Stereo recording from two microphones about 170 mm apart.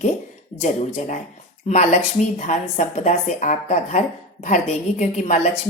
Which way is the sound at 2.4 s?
45° left (ahead or behind).